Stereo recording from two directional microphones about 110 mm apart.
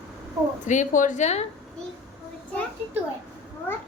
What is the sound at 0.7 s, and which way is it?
Speech, 90° left.